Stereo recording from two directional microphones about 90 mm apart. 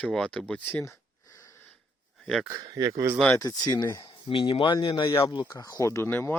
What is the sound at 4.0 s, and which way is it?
Speech, 75° left (ahead or behind).